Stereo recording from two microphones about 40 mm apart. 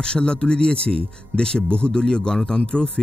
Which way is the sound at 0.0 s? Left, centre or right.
Left.